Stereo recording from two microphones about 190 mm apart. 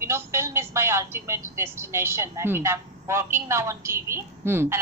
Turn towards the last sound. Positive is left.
turn(degrees=-15)  # may be behind; listen again after turning